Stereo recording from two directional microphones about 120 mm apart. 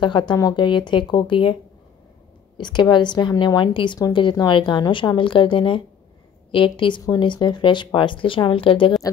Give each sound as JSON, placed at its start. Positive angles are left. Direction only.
{"t": 0.0, "sound": "speech", "side_deg": 40}